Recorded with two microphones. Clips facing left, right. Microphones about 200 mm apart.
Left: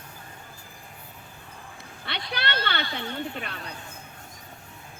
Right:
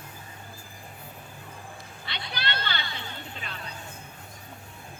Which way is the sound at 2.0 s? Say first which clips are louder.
Left 4 dB; 60° left (ahead or behind).